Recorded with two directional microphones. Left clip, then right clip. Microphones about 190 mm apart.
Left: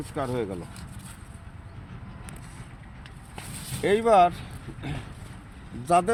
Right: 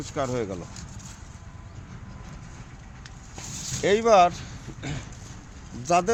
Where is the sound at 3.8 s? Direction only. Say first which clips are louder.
Right 1 dB; 35° right (ahead or behind).